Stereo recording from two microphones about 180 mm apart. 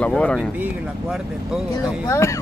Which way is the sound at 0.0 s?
5° left (ahead or behind).